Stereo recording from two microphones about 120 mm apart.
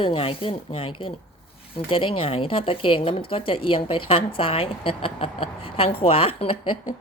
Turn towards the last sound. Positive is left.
turn(degrees=45)  # may be behind; listen again after turning